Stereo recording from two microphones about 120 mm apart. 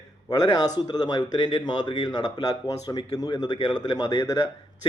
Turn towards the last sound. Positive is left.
turn(degrees=30)  # may be behind; listen again after turning